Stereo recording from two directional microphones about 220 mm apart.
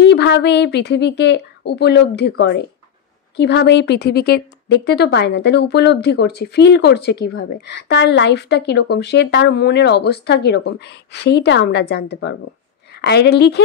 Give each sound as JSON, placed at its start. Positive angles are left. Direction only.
{"t": 0.0, "sound": "a woman's voice", "side_deg": 50}